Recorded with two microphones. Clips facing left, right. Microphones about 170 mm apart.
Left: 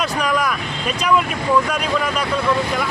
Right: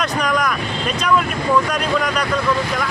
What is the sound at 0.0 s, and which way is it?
Speech, 5° left (ahead or behind).